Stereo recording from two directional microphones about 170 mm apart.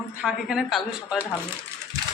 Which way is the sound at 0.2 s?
5° right (ahead or behind).